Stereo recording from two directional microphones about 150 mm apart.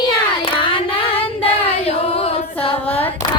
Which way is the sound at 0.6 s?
35° left (ahead or behind).